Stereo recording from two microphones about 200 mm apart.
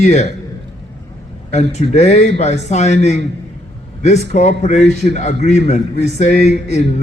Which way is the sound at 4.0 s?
35° left (ahead or behind).